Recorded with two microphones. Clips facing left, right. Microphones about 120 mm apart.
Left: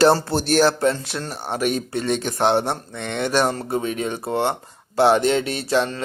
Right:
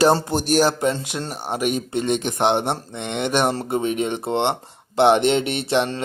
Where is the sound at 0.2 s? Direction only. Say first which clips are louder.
Left 1 dB; 15° right (ahead or behind).